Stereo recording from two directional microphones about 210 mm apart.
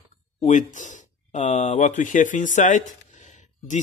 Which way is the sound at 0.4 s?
35° left (ahead or behind).